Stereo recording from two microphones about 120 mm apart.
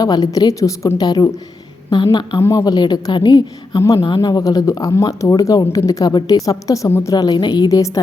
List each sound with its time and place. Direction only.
0.0 s a woman's voice: 30° left (ahead or behind)
2.4 s a woman's voice: 25° left (ahead or behind)